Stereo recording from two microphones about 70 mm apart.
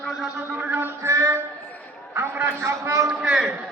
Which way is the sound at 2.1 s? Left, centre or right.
Right.